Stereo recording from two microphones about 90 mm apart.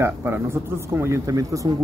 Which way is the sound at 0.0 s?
25° right (ahead or behind).